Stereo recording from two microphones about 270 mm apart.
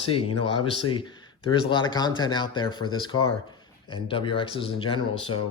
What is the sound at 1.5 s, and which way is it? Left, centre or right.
Speech, centre.